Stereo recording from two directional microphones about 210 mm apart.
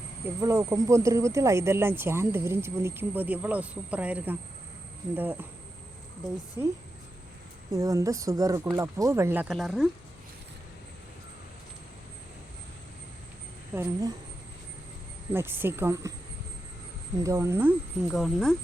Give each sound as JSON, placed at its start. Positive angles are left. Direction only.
{"t": 0.4, "sound": "speech", "side_deg": -15}
{"t": 6.6, "sound": "speech", "side_deg": -15}
{"t": 13.7, "sound": "speech", "side_deg": -5}
{"t": 15.3, "sound": "speech", "side_deg": -10}
{"t": 17.2, "sound": "speech", "side_deg": -15}